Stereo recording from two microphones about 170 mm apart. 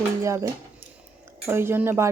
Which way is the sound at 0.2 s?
20° right (ahead or behind).